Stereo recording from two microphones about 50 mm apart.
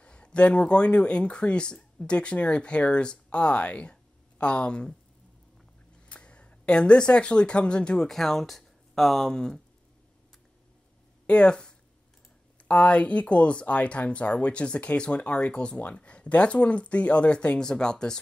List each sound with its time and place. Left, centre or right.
0.0 s speech: left
6.0 s speech: left
8.1 s speech: centre
11.2 s speech: left